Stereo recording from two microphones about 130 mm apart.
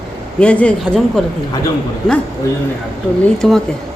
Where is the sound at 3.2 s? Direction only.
5° left (ahead or behind).